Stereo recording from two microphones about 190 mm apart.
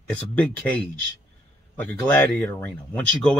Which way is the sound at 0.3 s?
5° left (ahead or behind).